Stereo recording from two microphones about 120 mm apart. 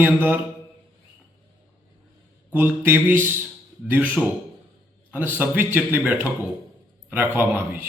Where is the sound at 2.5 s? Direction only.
15° right (ahead or behind).